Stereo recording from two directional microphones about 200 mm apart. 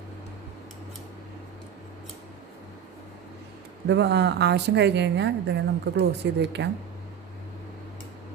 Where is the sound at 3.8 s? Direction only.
60° right (ahead or behind).